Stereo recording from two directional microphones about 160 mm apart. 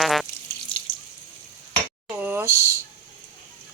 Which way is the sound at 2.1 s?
10° right (ahead or behind).